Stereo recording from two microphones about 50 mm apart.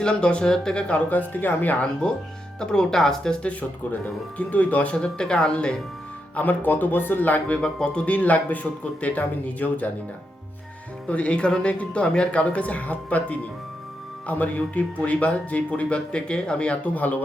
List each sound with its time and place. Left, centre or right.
0.0 s speech: centre; by 1.7 s left
2.6 s speech: centre
4.0 s speech: left
6.3 s speech: left
7.6 s speech: centre
8.0 s speech: left
11.1 s speech: left